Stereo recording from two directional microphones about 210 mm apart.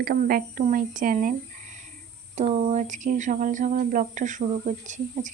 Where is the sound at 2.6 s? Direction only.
35° right (ahead or behind).